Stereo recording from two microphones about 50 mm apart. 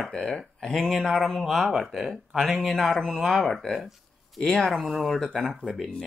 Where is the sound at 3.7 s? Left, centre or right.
Centre.